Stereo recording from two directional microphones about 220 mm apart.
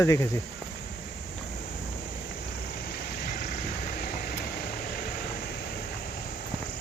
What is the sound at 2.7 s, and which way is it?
Vehicle, 45° left (ahead or behind).